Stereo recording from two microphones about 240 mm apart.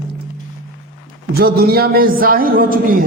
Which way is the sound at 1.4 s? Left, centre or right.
Right.